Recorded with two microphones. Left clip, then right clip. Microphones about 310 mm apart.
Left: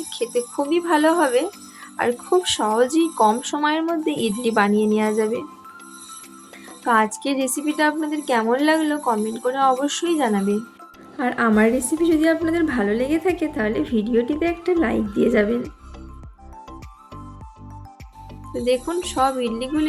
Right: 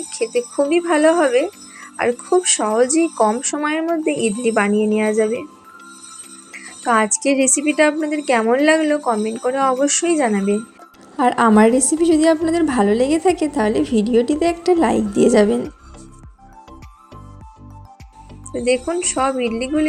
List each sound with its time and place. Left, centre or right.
0.2 s speech: centre
6.8 s a woman's voice: centre
11.2 s a woman's voice: centre
18.9 s speech: centre